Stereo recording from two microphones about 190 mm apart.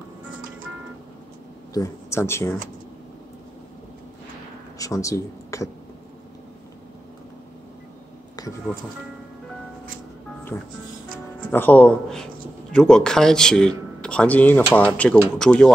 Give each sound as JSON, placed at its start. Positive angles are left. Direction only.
{"t": 1.7, "sound": "speech", "side_deg": 15}
{"t": 4.7, "sound": "speech", "side_deg": 15}
{"t": 8.7, "sound": "speech", "side_deg": 5}
{"t": 10.5, "sound": "speech", "side_deg": 15}